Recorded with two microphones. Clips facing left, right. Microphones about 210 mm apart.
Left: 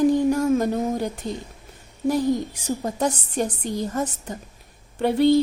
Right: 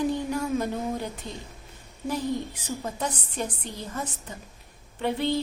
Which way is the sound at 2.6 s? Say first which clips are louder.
Left 9 dB; 40° left (ahead or behind).